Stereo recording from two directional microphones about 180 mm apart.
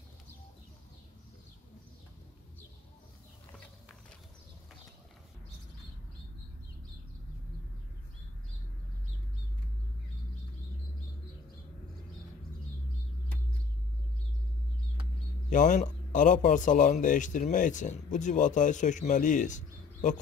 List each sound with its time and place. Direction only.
15.5 s speech: 45° left (ahead or behind)